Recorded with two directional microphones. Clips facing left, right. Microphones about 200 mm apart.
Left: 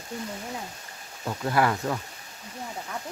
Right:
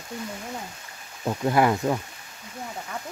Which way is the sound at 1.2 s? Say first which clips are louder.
Right 3 dB; 20° right (ahead or behind).